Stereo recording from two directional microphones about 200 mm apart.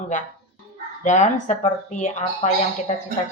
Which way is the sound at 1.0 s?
35° left (ahead or behind).